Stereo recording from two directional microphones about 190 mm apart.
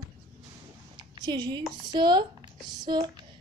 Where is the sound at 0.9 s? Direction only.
20° right (ahead or behind).